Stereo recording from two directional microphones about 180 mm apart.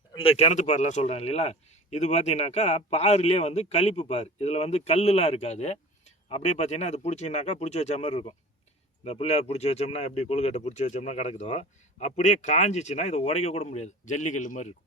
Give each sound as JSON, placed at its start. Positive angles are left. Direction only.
{"t": 0.1, "sound": "a man's voice", "side_deg": 30}